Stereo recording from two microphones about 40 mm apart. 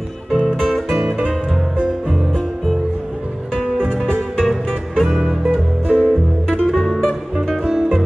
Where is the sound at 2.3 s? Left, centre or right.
Centre.